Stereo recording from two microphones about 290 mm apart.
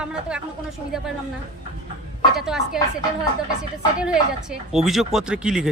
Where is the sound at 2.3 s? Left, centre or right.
Centre.